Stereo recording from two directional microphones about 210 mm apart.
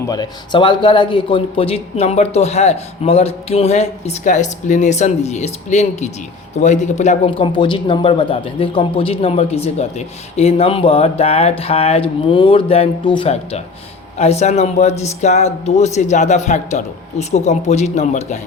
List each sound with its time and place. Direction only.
0.1 s a man's voice: 20° left (ahead or behind)